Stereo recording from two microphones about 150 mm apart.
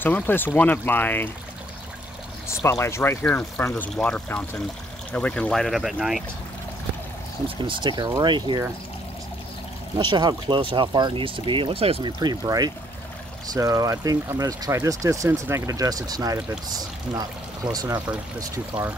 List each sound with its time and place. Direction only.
0.0 s speech: 15° left (ahead or behind)
2.4 s speech: 20° left (ahead or behind); by 6.2 s centre (ahead or behind)
7.4 s speech: 35° right (ahead or behind)
9.9 s speech: 30° right (ahead or behind)
12.2 s speech: 25° right (ahead or behind)